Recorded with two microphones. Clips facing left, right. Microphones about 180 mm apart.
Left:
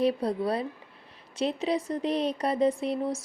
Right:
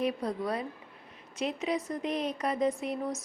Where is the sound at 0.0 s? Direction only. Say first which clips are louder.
Left 5 dB; 35° left (ahead or behind).